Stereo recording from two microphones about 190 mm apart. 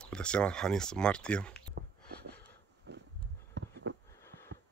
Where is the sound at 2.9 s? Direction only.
65° right (ahead or behind).